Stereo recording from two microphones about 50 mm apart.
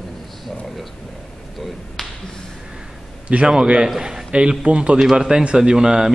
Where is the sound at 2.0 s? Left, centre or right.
Centre.